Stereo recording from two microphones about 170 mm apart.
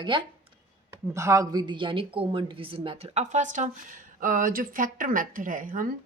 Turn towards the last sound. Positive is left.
turn(degrees=-50)  # may be behind; listen again after turning